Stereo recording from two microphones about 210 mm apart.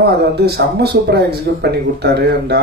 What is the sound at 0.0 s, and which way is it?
Speech, 50° right (ahead or behind).